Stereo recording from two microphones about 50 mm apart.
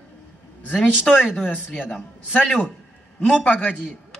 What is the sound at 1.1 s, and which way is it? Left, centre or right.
Speech, centre.